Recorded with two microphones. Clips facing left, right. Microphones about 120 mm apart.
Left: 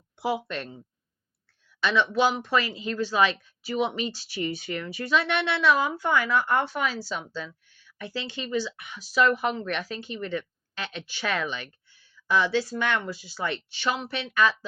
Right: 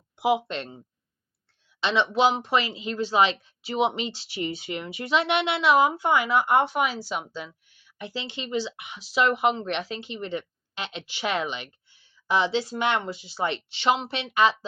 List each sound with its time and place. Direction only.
0.2 s speech: 20° right (ahead or behind)
1.8 s speech: 25° right (ahead or behind)